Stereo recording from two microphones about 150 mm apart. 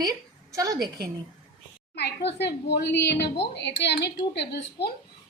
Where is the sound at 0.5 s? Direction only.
20° right (ahead or behind).